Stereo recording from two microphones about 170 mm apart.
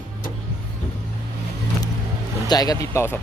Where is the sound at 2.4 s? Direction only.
20° left (ahead or behind).